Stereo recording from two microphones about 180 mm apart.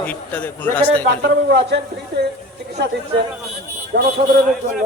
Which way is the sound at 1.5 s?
70° right (ahead or behind).